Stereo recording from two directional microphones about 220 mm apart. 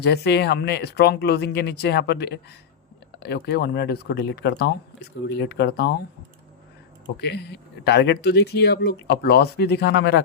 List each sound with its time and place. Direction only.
0.0 s speech: 50° left (ahead or behind)
7.2 s speech: 50° left (ahead or behind)